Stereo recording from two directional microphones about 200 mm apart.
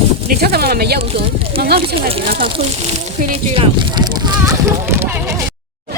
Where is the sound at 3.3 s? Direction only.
25° right (ahead or behind); by 5.3 s 10° right (ahead or behind).